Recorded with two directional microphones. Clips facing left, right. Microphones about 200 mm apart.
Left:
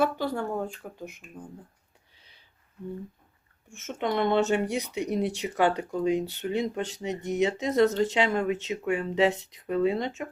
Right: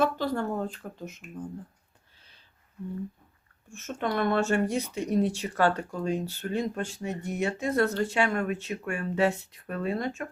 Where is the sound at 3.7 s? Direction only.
20° left (ahead or behind).